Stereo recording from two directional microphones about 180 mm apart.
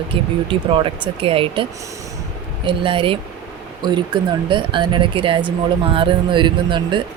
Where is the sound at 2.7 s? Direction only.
30° right (ahead or behind).